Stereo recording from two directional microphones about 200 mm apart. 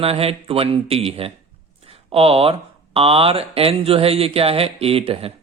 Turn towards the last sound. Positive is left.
turn(degrees=-30)  # may be behind; listen again after turning